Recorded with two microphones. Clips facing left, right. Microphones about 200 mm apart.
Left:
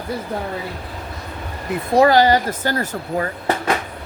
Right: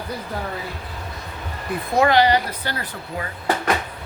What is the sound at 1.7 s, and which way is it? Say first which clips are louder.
Speech: left 4 dB; 35° left (ahead or behind).